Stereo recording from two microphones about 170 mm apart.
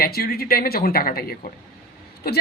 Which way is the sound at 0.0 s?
65° left (ahead or behind).